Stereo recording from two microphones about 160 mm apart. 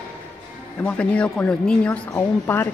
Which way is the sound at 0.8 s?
5° left (ahead or behind).